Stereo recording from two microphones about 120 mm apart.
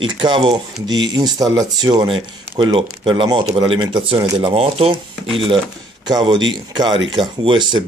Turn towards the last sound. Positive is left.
turn(degrees=-40)  # may be behind; listen again after turning